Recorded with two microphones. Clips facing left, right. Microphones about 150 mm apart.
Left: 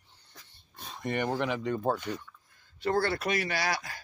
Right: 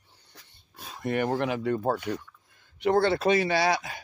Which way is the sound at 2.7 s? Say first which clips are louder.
Right 5 dB; 20° right (ahead or behind).